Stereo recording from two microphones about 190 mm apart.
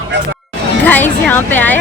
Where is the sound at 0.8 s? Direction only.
10° left (ahead or behind).